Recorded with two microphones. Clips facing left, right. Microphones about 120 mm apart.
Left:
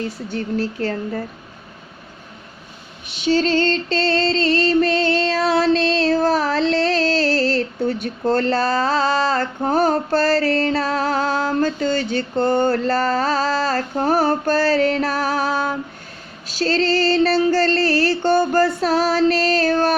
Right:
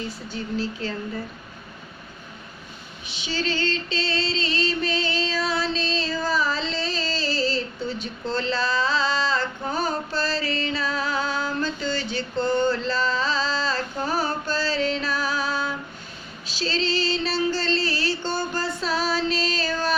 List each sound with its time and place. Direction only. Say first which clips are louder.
0.3 s music: left 5 dB; 65° left (ahead or behind)
3.2 s music: left 11 dB; 65° left (ahead or behind)
3.6 s music: left 7 dB; centre (ahead or behind)
3.9 s music: left 8 dB; 60° left (ahead or behind)
18.8 s female singing: left 8 dB; 60° left (ahead or behind)